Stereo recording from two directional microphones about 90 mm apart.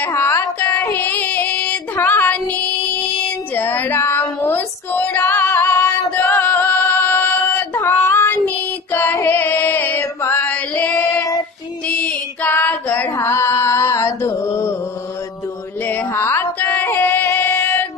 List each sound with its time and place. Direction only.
0.0 s music: 25° left (ahead or behind)
0.9 s female singing: 20° left (ahead or behind)
8.5 s music: 25° left (ahead or behind)
10.4 s chant: 15° left (ahead or behind)
11.9 s female singing: 15° left (ahead or behind)
13.1 s a sound: 30° left (ahead or behind)
15.8 s music: 20° left (ahead or behind)